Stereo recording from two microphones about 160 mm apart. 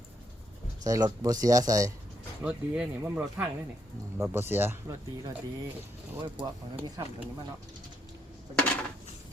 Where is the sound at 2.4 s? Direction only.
5° right (ahead or behind).